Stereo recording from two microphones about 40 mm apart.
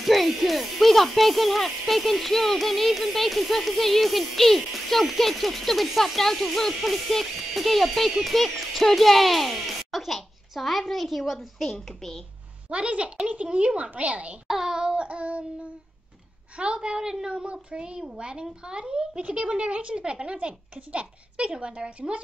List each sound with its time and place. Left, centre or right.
0.0 s speech: centre
12.6 s speech: right
14.5 s speech: centre; by 15.4 s right
16.5 s speech: right
17.3 s speech: right